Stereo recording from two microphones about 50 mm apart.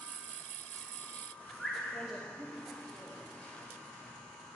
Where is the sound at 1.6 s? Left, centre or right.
Centre.